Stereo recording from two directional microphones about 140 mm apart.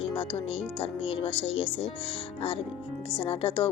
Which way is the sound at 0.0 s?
40° left (ahead or behind).